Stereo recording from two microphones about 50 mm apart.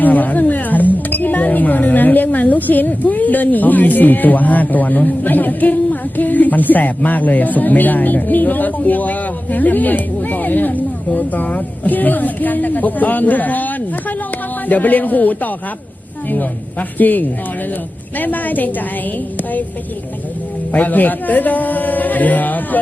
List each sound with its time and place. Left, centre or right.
0.0 s speech: left
17.0 s speech: left
20.7 s speech: left